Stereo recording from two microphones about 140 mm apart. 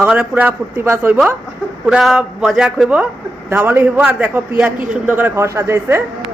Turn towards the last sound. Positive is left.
turn(degrees=-20)  # may be behind; listen again after turning